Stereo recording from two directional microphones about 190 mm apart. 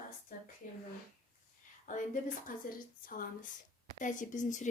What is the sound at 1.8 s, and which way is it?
Speech, 40° left (ahead or behind).